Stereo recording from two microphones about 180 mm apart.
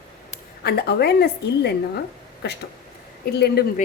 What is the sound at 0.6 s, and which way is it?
A woman's voice, 60° left (ahead or behind).